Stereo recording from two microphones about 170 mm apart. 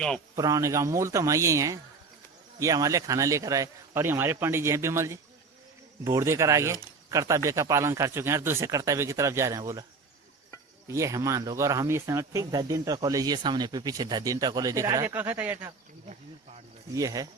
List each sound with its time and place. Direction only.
0.3 s speech: 20° right (ahead or behind)
10.8 s speech: 15° right (ahead or behind)
16.9 s speech: 20° right (ahead or behind)